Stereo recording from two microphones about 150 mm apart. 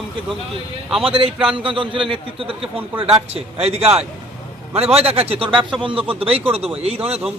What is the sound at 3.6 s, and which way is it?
A man's voice, 45° right (ahead or behind).